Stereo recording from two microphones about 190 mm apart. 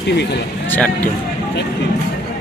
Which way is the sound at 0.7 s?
10° left (ahead or behind).